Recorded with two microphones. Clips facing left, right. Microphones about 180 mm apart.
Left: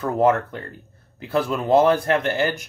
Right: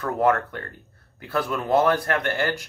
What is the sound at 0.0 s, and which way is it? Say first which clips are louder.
Speech: left 3 dB; 20° left (ahead or behind).